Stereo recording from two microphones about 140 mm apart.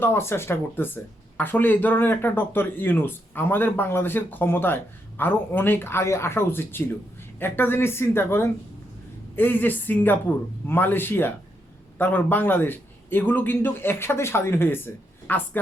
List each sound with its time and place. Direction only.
0.0 s speech: 15° left (ahead or behind)